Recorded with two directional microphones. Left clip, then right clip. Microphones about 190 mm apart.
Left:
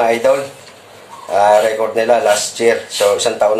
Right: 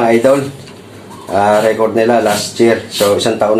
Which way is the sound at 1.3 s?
15° left (ahead or behind).